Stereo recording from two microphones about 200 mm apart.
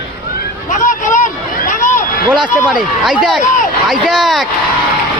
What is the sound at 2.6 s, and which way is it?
Speech, 5° right (ahead or behind).